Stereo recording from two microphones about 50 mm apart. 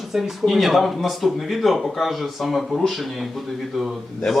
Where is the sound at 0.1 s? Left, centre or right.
Centre.